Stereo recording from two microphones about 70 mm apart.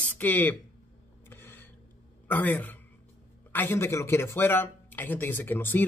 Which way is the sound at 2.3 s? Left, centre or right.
Left.